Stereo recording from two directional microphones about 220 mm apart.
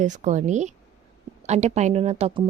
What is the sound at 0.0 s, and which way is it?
A woman's voice, 35° right (ahead or behind).